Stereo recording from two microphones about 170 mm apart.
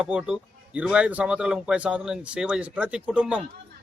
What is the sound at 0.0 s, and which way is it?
A man's voice, 5° right (ahead or behind).